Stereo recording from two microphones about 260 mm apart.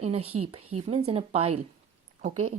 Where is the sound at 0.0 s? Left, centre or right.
Right.